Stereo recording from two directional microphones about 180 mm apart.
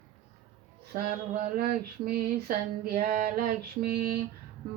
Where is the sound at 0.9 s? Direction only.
50° right (ahead or behind).